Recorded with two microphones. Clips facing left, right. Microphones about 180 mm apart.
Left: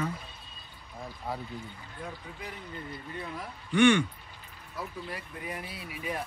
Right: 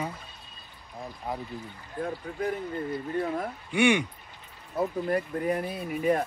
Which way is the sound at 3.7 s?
10° right (ahead or behind).